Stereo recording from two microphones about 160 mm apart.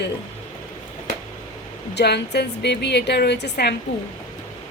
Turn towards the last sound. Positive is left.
turn(degrees=90)